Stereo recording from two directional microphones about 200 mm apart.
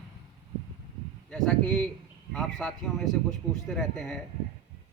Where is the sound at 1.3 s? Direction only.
5° left (ahead or behind).